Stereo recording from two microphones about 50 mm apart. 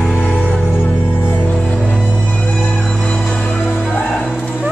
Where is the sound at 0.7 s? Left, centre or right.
Left.